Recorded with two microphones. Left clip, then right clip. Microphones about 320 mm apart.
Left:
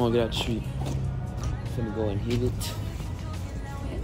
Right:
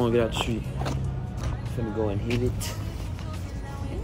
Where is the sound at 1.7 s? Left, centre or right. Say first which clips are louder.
Right 2 dB; centre.